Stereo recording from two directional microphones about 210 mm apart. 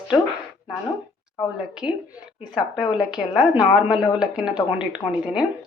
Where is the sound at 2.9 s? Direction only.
5° right (ahead or behind).